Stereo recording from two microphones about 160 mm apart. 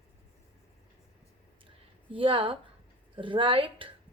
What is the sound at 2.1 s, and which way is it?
Speech, 30° right (ahead or behind).